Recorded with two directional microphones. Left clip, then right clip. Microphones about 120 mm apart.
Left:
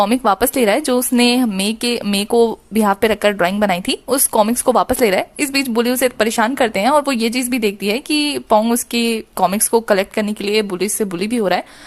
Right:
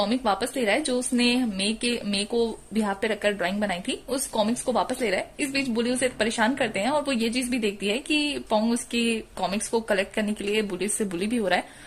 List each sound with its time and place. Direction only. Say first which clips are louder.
0.0 s a woman's voice: left 10 dB; 45° left (ahead or behind)